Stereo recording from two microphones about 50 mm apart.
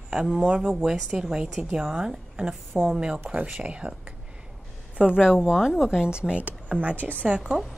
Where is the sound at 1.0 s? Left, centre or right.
Centre.